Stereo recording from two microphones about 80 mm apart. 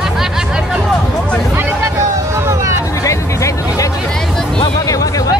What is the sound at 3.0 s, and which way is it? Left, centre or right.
Music, left.